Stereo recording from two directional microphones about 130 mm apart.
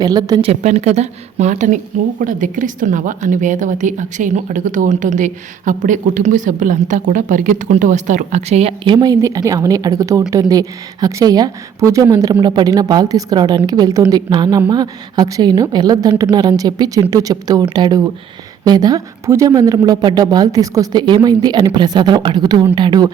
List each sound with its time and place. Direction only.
0.0 s a woman's voice: 30° right (ahead or behind)
0.4 s a woman's voice: 60° right (ahead or behind); by 23.1 s 35° right (ahead or behind)